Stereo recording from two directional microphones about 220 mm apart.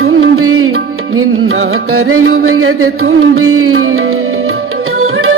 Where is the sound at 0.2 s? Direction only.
75° right (ahead or behind).